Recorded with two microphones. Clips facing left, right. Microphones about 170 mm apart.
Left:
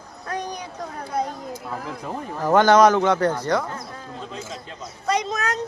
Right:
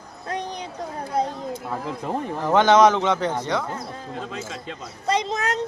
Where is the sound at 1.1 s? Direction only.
25° right (ahead or behind).